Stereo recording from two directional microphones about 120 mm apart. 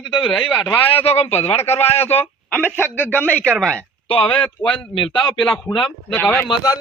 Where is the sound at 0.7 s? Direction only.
55° left (ahead or behind).